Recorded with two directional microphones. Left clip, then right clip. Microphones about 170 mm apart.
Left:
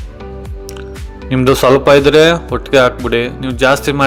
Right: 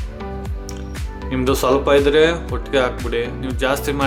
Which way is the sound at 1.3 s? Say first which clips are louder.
Left 8 dB; 45° left (ahead or behind).